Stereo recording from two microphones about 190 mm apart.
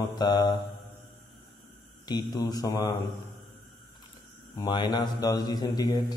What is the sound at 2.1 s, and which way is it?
Speech, 20° left (ahead or behind).